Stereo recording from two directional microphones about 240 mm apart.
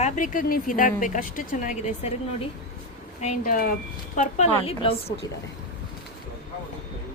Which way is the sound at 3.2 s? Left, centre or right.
Left.